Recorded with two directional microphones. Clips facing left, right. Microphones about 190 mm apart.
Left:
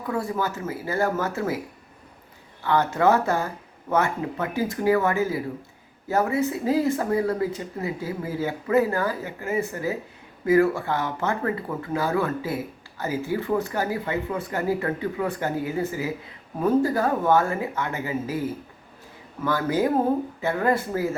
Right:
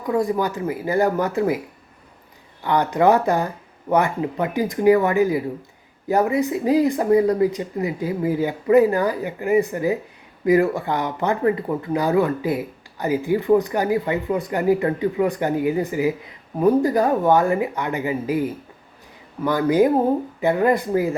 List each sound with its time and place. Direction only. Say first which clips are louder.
0.1 s speech: right 6 dB; 15° right (ahead or behind)
2.6 s speech: right 3 dB; 15° right (ahead or behind)